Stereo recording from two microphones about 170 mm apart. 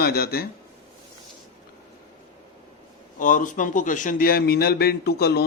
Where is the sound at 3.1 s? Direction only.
50° left (ahead or behind).